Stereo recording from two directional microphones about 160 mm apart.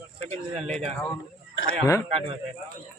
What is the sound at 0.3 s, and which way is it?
Speech, 45° right (ahead or behind).